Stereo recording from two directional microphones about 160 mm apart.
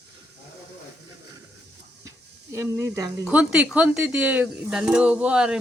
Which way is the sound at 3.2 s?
5° right (ahead or behind).